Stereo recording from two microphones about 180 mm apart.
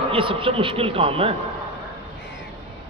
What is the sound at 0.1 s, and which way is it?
A man's voice, 30° right (ahead or behind).